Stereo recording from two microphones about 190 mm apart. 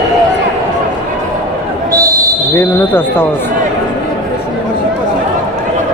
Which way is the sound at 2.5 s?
10° left (ahead or behind).